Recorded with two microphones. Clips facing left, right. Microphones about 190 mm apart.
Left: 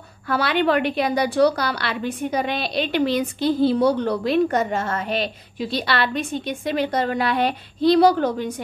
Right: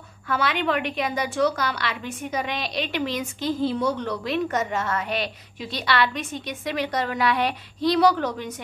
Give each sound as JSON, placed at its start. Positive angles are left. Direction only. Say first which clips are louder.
{"t": 0.3, "sound": "a woman's voice", "louder": "left 5 dB", "side_deg": 35}